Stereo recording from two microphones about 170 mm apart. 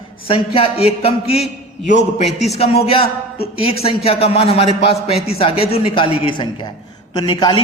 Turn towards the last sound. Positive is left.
turn(degrees=30)  # may be behind; listen again after turning